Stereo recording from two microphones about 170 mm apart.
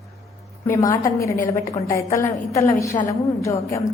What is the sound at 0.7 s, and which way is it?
A woman's voice, 15° left (ahead or behind).